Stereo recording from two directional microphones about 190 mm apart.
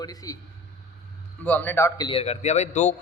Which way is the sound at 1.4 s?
10° left (ahead or behind).